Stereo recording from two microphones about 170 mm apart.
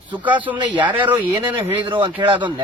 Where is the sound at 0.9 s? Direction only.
10° right (ahead or behind).